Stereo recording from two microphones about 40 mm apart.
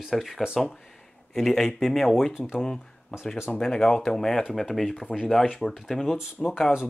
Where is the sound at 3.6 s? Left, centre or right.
Centre.